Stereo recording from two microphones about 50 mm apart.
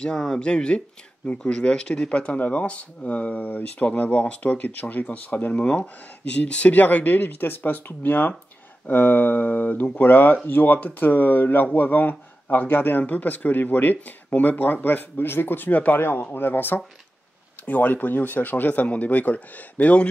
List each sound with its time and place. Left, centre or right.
0.0 s speech: centre; by 13.0 s left
13.0 s speech: left